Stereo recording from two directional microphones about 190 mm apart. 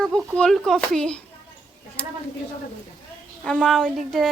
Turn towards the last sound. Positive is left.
turn(degrees=0)  # may be behind; listen again after turning